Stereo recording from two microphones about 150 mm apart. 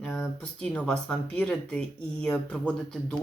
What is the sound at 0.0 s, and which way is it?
Speech, 5° left (ahead or behind).